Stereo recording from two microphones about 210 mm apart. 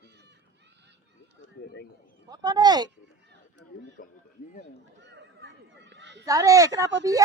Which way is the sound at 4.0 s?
40° left (ahead or behind).